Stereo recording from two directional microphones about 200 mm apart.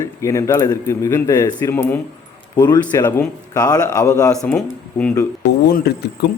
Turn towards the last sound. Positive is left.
turn(degrees=50)  # may be behind; listen again after turning